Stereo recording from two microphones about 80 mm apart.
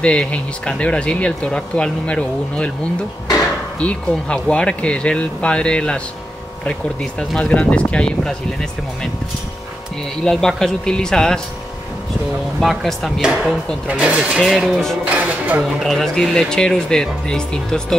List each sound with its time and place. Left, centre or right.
0.0 s speech: centre
4.1 s speech: centre
10.2 s speech: centre
12.5 s speech: centre
13.2 s speech: centre
15.0 s a sound: centre
15.8 s speech: centre